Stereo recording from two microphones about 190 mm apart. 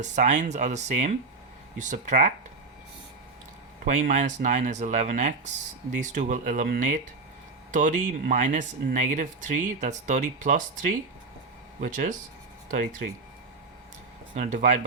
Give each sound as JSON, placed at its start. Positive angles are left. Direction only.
{"t": 0.0, "sound": "speech", "side_deg": -40}
{"t": 3.8, "sound": "speech", "side_deg": -45}
{"t": 11.8, "sound": "speech", "side_deg": -40}
{"t": 14.3, "sound": "speech", "side_deg": -40}